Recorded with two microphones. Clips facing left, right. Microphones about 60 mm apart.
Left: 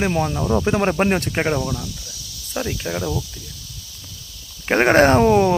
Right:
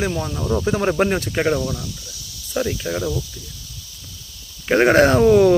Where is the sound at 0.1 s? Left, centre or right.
Left.